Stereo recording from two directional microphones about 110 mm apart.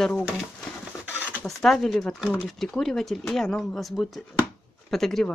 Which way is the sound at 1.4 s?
Centre (ahead or behind).